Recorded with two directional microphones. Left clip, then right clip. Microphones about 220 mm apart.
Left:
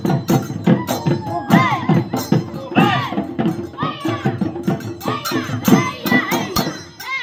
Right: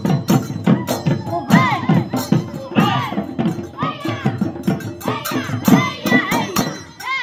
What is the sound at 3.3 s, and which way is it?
Music, centre (ahead or behind).